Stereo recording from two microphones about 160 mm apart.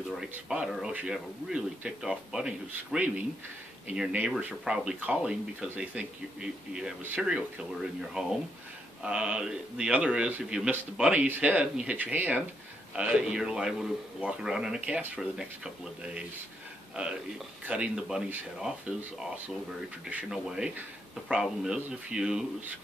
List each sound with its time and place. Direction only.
0.1 s a man's voice: 5° right (ahead or behind)
20.1 s speech: 5° right (ahead or behind)